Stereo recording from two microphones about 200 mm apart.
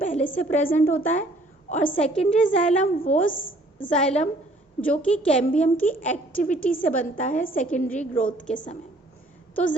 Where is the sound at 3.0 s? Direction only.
45° left (ahead or behind).